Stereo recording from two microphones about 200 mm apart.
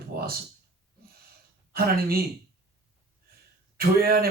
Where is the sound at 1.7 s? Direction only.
50° right (ahead or behind).